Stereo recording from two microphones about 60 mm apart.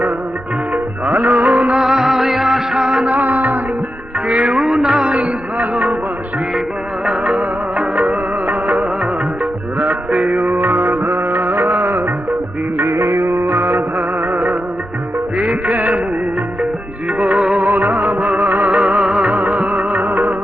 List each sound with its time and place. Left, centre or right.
1.0 s music: right
1.7 s music: centre
3.2 s music: right
4.5 s music: centre
7.0 s music: centre
7.9 s music: centre
8.4 s music: right
13.0 s music: right
15.4 s music: centre
17.7 s music: right
18.3 s music: right
18.8 s music: centre; by 20.3 s right